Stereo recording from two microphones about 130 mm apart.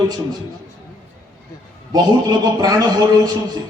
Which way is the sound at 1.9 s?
30° right (ahead or behind).